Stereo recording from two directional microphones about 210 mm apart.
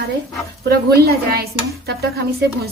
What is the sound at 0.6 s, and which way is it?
Dishes, 50° right (ahead or behind).